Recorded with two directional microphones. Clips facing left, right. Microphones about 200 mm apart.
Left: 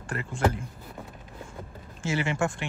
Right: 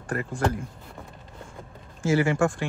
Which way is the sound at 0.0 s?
25° left (ahead or behind).